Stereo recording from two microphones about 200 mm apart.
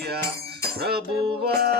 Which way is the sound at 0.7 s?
50° right (ahead or behind).